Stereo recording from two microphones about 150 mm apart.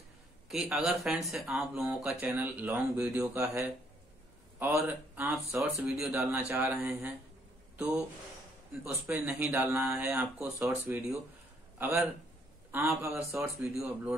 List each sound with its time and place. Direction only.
0.5 s speech: 5° right (ahead or behind)
3.2 s speech: 20° right (ahead or behind); by 6.4 s 5° right (ahead or behind)
6.5 s speech: 15° right (ahead or behind)
7.7 s a sound: 10° right (ahead or behind)
8.8 s speech: 10° right (ahead or behind)
13.6 s speech: 5° right (ahead or behind)